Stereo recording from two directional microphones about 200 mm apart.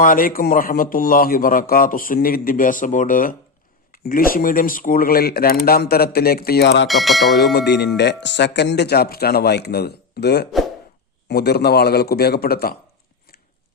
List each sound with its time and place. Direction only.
0.0 s a man's voice: 45° left (ahead or behind)
6.8 s speech: centre (ahead or behind)
7.3 s a man's voice: 55° left (ahead or behind)